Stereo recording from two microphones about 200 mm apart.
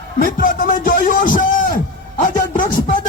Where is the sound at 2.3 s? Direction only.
40° left (ahead or behind).